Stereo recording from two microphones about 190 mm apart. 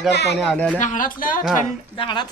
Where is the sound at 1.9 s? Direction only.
25° left (ahead or behind).